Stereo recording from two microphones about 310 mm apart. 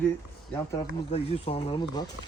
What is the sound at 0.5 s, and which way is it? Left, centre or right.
Speech, centre.